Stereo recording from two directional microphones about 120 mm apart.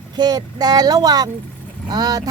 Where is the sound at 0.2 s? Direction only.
35° right (ahead or behind).